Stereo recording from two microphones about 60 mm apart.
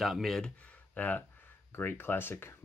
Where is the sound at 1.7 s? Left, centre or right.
Left.